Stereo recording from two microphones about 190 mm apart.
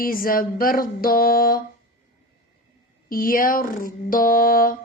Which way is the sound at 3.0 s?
50° left (ahead or behind).